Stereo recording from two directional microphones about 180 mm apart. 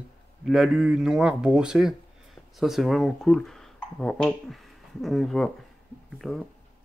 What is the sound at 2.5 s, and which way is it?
Speech, centre (ahead or behind).